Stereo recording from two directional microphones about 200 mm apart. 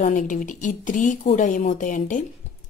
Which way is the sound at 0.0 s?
40° left (ahead or behind).